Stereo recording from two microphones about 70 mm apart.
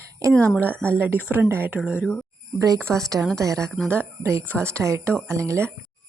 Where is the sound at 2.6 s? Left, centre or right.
Right.